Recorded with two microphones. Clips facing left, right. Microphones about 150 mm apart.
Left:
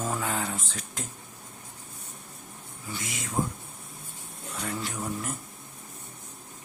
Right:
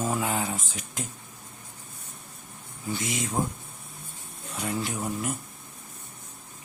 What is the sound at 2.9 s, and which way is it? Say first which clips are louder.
Speech: right 7 dB; 20° right (ahead or behind).